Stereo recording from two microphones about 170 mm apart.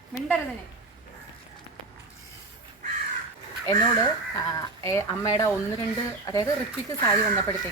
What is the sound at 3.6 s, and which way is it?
Speech, 20° left (ahead or behind).